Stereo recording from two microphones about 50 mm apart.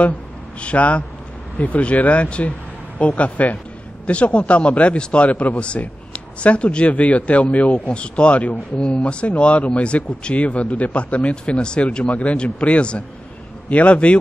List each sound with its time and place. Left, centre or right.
0.6 s a man's voice: left